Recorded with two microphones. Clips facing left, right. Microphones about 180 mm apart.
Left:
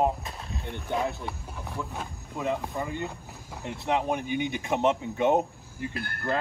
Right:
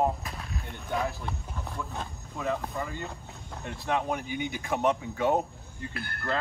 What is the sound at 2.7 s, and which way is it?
Speech, 15° left (ahead or behind).